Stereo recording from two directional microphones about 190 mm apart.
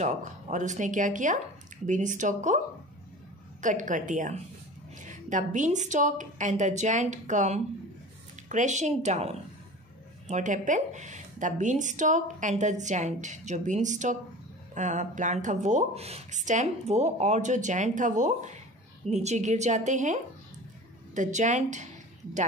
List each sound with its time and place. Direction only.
0.0 s a woman's voice: 40° right (ahead or behind)
3.6 s a woman's voice: 40° right (ahead or behind)